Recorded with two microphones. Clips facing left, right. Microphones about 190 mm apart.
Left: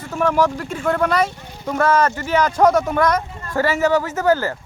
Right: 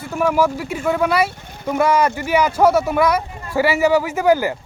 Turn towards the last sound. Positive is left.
turn(degrees=-15)  # may be behind; listen again after turning